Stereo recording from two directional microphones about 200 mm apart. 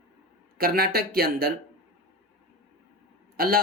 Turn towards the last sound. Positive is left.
turn(degrees=-45)  # may be behind; listen again after turning